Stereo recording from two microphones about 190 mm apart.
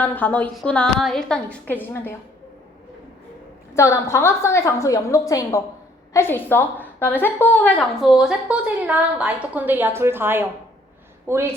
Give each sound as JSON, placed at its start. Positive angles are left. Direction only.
{"t": 0.0, "sound": "a woman's voice", "side_deg": 10}
{"t": 3.8, "sound": "a woman's voice", "side_deg": 15}